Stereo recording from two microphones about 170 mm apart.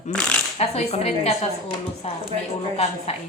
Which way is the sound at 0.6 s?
40° left (ahead or behind).